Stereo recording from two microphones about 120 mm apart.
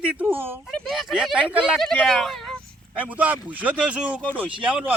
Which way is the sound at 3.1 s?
15° right (ahead or behind).